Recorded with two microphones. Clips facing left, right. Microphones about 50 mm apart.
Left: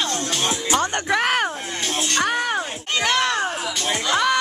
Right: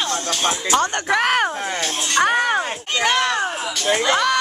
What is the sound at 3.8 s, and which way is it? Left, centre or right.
Speech, right.